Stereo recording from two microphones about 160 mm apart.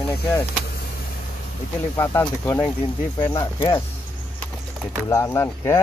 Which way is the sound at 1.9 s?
15° left (ahead or behind).